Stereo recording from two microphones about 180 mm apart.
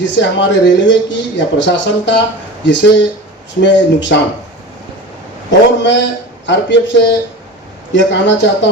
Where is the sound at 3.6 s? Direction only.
80° left.